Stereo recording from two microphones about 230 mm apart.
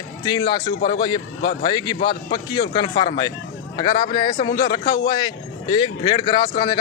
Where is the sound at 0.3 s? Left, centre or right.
Centre.